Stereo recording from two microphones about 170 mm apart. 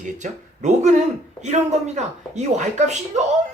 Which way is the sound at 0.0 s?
45° right (ahead or behind).